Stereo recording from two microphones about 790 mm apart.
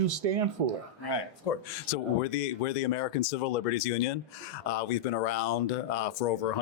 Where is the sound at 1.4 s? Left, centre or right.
Left.